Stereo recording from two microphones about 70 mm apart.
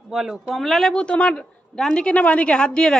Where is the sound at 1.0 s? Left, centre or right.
Centre.